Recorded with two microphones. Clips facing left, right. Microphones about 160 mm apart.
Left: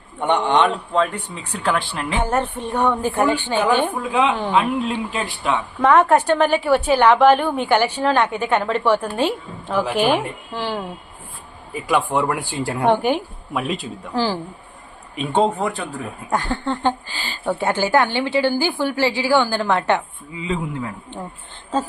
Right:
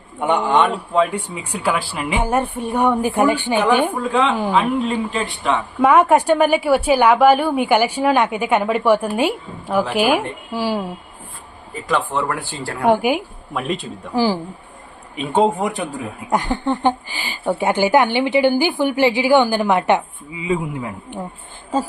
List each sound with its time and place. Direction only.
0.2 s speech: 5° right (ahead or behind)
4.1 s speech: 10° left (ahead or behind)
4.4 s a woman's voice: 5° right (ahead or behind)
5.8 s speech: 10° right (ahead or behind)
11.7 s speech: 10° left (ahead or behind)
12.8 s a woman's voice: 10° right (ahead or behind)
14.1 s speech: 10° right (ahead or behind)
15.1 s speech: centre (ahead or behind)